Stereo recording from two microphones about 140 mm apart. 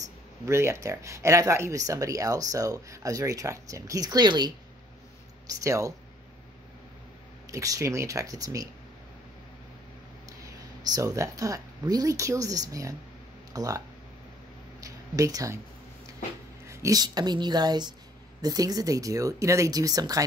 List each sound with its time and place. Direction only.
0.5 s speech: 20° right (ahead or behind)
5.5 s speech: 20° right (ahead or behind)
7.5 s speech: 25° right (ahead or behind)
10.8 s speech: 25° right (ahead or behind)
14.8 s a sound: 25° right (ahead or behind)
16.6 s speech: 20° right (ahead or behind)